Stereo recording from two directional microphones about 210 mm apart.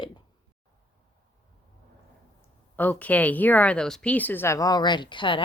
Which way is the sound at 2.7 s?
10° left (ahead or behind).